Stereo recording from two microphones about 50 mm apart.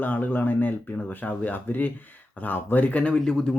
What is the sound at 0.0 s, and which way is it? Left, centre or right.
Speech, left.